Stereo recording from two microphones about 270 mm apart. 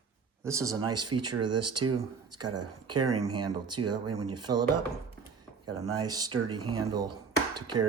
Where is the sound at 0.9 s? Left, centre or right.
Right.